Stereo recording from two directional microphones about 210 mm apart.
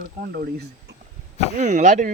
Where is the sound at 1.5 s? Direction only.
35° right (ahead or behind).